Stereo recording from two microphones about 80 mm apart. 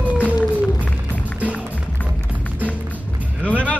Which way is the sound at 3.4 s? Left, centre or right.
Centre.